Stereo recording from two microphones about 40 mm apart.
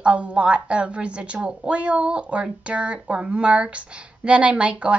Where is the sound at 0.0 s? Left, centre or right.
Right.